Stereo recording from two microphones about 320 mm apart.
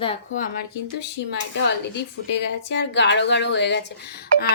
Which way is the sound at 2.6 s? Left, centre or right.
Left.